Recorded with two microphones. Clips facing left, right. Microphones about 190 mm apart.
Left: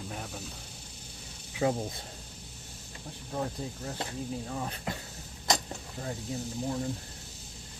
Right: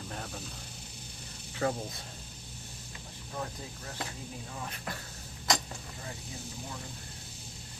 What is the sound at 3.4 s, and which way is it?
Speech, 30° left (ahead or behind).